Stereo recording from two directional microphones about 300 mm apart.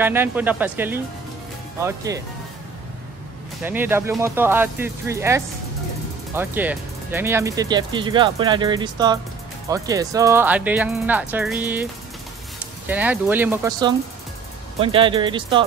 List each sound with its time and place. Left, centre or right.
0.0 s speech: centre
3.6 s speech: centre